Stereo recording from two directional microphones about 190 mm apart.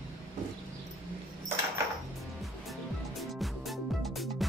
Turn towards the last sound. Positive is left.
turn(degrees=0)  # may be behind; listen again after turning